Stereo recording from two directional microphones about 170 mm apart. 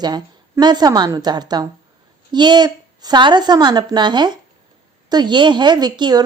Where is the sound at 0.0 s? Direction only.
25° right (ahead or behind).